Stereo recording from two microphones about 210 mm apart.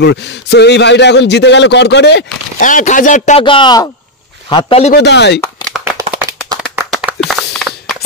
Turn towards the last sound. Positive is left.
turn(degrees=0)  # may be behind; listen again after turning